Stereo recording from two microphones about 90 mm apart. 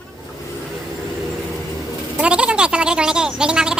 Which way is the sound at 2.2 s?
10° right (ahead or behind).